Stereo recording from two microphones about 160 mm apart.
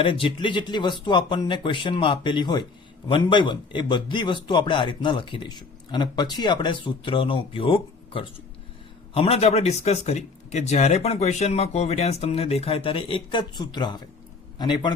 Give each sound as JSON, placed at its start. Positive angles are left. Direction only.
{"t": 0.0, "sound": "speech", "side_deg": 35}